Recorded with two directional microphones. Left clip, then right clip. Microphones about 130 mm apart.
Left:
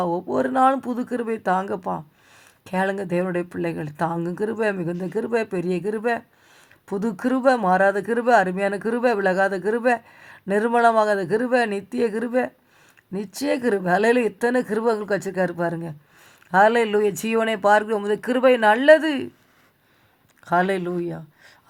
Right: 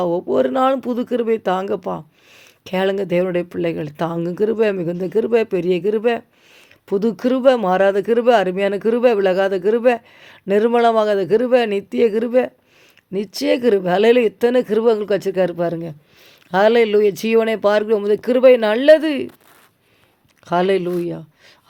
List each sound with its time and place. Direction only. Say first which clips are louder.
0.0 s speech: right 5 dB; 40° right (ahead or behind)
20.4 s speech: right 4 dB; 40° right (ahead or behind)